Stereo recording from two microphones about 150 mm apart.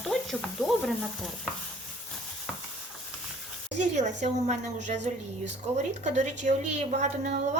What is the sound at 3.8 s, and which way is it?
A woman's voice, 50° right (ahead or behind).